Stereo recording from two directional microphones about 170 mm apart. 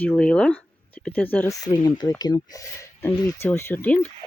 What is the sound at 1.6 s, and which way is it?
Speech, 25° left (ahead or behind).